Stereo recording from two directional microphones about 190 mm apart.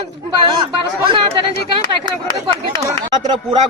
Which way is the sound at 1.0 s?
25° right (ahead or behind).